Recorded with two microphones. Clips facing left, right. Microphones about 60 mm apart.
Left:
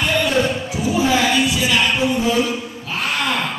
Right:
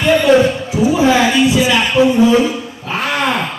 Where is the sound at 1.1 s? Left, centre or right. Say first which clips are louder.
Right 5 dB; right.